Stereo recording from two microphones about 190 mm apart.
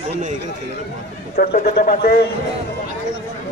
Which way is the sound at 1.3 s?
50° left (ahead or behind).